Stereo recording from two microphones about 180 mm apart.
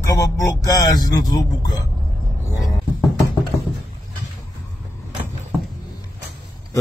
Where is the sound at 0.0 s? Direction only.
20° left (ahead or behind).